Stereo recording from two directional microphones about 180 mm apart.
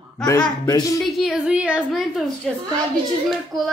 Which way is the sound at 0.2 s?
20° left (ahead or behind).